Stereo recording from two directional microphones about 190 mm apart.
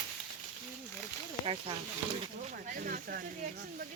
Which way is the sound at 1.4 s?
30° right (ahead or behind).